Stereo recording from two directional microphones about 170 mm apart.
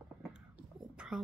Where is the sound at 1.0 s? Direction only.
5° right (ahead or behind).